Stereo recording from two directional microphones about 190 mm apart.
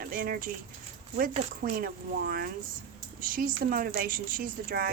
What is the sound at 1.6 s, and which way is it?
Speech, 50° right (ahead or behind).